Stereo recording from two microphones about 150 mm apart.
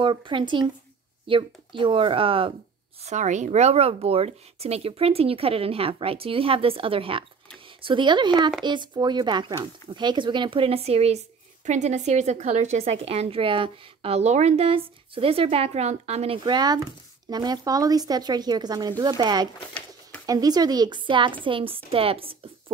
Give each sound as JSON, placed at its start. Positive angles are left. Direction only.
{"t": 0.0, "sound": "speech", "side_deg": -35}
{"t": 3.0, "sound": "speech", "side_deg": -50}
{"t": 16.4, "sound": "speech", "side_deg": -25}